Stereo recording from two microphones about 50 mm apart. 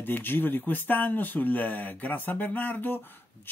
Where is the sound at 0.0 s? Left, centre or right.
Left.